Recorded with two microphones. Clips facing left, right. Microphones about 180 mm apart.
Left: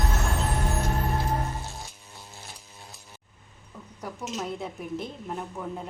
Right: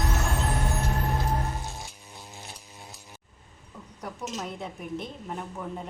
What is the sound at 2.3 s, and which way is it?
Chainsaw, 15° right (ahead or behind).